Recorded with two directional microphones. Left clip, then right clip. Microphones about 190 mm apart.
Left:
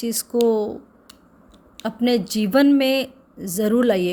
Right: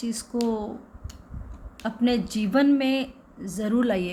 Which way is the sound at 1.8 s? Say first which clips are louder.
Left 5 dB; 45° left (ahead or behind).